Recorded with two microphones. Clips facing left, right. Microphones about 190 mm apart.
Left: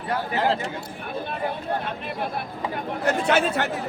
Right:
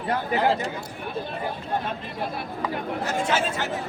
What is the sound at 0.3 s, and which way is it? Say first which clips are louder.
Speech: right 1 dB; centre (ahead or behind).